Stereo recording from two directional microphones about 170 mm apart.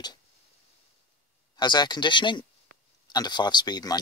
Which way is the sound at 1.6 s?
25° left (ahead or behind).